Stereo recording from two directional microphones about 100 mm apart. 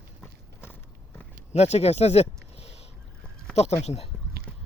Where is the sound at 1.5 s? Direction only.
90° left.